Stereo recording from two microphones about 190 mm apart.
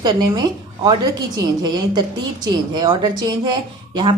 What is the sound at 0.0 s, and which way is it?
Speech, 25° right (ahead or behind).